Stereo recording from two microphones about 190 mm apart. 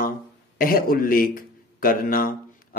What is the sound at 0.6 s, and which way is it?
A man's voice, 50° left (ahead or behind).